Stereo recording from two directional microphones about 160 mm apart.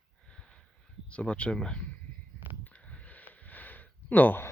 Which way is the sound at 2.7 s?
10° left (ahead or behind).